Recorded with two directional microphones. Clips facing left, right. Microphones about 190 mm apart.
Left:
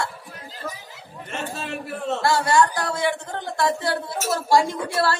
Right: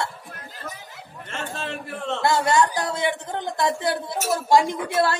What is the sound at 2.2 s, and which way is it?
Speech, 20° right (ahead or behind).